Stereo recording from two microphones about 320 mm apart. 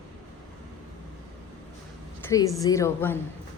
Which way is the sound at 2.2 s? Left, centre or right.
Centre.